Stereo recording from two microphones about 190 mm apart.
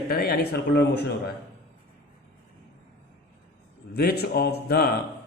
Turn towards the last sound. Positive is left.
turn(degrees=55)  # may be behind; listen again after turning